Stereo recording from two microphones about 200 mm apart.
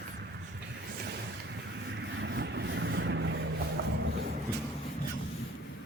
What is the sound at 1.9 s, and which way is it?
Vehicle, 60° right (ahead or behind).